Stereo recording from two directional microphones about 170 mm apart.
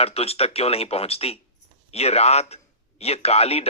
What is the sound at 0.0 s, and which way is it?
A man's voice, 35° left (ahead or behind).